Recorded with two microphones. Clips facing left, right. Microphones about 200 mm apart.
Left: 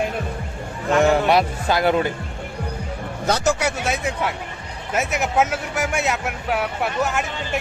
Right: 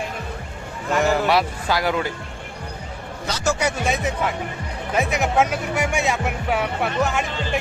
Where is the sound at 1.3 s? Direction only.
20° left (ahead or behind).